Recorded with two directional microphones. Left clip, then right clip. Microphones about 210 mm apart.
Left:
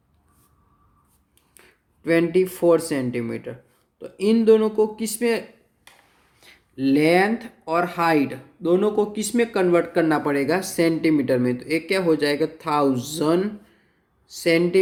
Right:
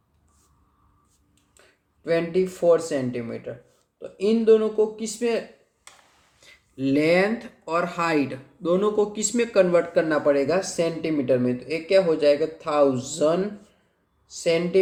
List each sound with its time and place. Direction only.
1.6 s a sound: 45° left (ahead or behind)
2.0 s speech: 45° left (ahead or behind)
6.4 s speech: 20° left (ahead or behind); by 14.8 s 45° left (ahead or behind)